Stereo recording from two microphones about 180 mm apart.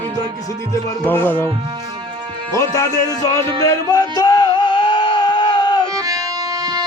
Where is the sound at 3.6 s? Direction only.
20° left (ahead or behind).